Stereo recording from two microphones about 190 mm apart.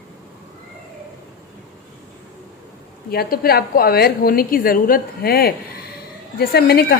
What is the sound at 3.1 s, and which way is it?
A woman's voice, 55° left (ahead or behind).